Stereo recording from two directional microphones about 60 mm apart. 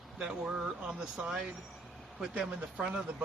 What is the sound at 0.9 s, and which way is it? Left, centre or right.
Speech, centre.